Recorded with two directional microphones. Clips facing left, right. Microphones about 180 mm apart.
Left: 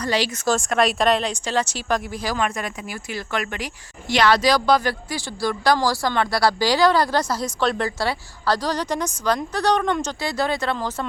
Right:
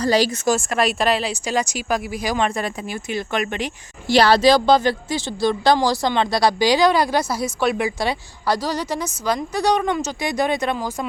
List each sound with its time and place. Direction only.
0.0 s speech: 35° right (ahead or behind)
0.4 s speech: 5° right (ahead or behind)
2.4 s speech: 30° right (ahead or behind)
4.1 s speech: 35° right (ahead or behind); by 10.9 s 15° right (ahead or behind)